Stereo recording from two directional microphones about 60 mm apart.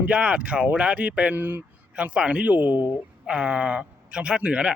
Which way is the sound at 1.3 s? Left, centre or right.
Right.